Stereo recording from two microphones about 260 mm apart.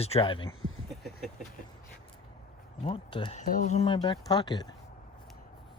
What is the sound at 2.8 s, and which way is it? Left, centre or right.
Speech, centre.